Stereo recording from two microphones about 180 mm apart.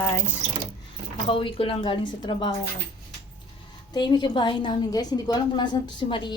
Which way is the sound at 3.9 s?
25° left (ahead or behind).